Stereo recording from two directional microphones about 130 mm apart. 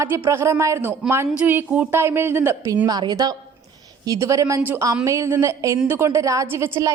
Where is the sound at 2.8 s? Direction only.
30° right (ahead or behind).